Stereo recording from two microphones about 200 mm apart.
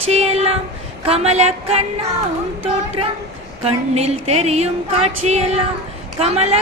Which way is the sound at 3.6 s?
30° right (ahead or behind).